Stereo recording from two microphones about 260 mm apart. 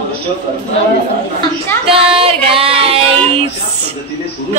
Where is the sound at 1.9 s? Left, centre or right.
Right.